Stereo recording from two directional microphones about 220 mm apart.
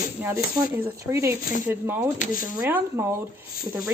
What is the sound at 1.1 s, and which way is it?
Speech, 10° right (ahead or behind).